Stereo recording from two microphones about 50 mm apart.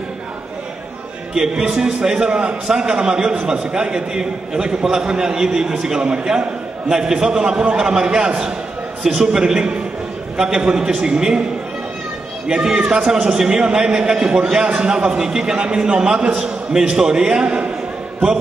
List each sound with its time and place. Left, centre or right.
1.3 s a man's voice: centre
12.8 s a man's voice: centre